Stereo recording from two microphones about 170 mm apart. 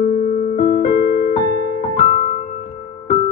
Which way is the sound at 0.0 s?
55° left (ahead or behind).